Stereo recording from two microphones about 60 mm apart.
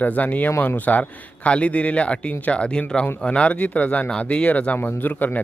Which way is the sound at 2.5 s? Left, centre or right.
Centre.